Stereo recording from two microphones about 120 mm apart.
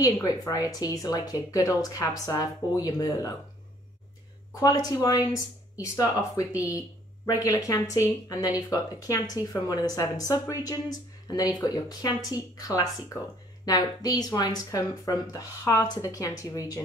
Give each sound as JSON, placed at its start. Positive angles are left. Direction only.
{"t": 0.0, "sound": "speech", "side_deg": 30}
{"t": 4.6, "sound": "speech", "side_deg": 30}